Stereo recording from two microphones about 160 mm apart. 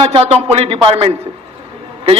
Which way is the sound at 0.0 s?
35° right (ahead or behind).